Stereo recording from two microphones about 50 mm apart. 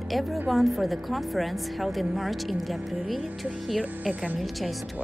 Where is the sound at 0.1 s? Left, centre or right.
Centre.